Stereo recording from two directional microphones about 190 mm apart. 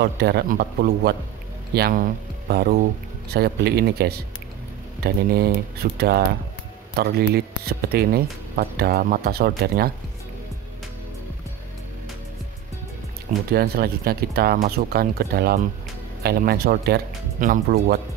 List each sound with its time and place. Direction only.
0.0 s speech: 60° right (ahead or behind)
13.5 s speech: 55° right (ahead or behind)